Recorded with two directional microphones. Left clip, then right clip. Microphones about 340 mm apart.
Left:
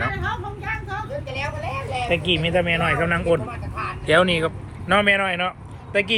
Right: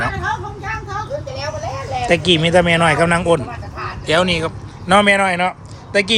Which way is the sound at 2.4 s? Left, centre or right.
Centre.